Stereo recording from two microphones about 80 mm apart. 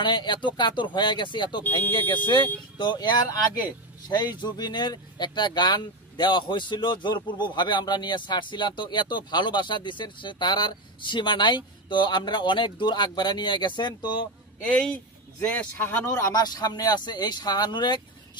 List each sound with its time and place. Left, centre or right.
0.0 s speech: left
15.5 s speech: left
16.3 s speech: left